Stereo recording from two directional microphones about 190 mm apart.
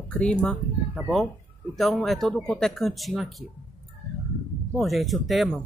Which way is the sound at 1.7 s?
Centre (ahead or behind).